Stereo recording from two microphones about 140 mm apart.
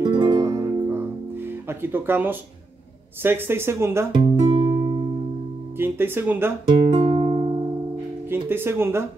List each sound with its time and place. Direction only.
0.0 s music: 30° right (ahead or behind)
1.7 s speech: 15° right (ahead or behind)
4.1 s music: 35° right (ahead or behind)
5.8 s speech: 15° right (ahead or behind)
6.9 s music: 30° right (ahead or behind)
8.5 s speech: 15° right (ahead or behind)